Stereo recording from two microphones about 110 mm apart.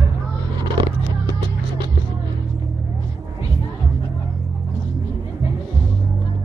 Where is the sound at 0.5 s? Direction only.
40° right (ahead or behind).